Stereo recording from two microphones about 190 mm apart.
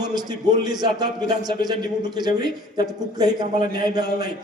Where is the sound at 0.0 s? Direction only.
20° right (ahead or behind).